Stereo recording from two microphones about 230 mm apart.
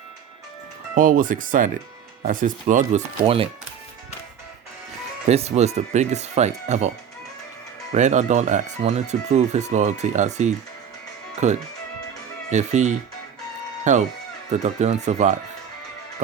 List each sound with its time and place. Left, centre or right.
0.9 s speech: right
5.3 s speech: right
7.9 s speech: right
12.5 s speech: right